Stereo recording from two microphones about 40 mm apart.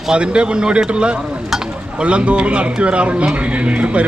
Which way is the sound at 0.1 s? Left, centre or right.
Right.